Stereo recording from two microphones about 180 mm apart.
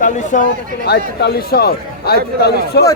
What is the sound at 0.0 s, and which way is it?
Speech, 45° left (ahead or behind).